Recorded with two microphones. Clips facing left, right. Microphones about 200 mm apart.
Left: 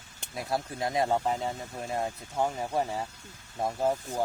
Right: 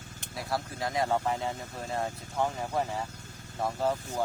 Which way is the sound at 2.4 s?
15° left (ahead or behind).